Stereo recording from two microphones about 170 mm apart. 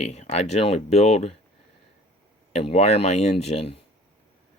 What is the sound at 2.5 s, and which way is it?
Speech, 40° left (ahead or behind).